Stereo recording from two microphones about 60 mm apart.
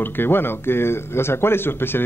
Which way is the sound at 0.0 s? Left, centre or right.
Left.